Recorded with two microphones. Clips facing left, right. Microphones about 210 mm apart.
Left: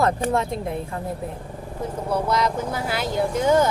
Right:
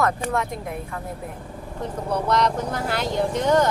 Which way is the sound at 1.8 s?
5° left (ahead or behind).